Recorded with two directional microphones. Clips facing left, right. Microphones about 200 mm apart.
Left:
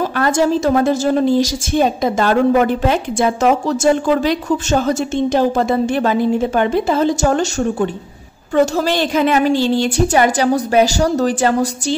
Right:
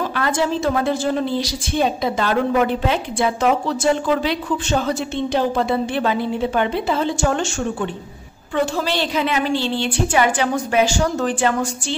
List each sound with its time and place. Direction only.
0.1 s a woman's voice: 45° left (ahead or behind)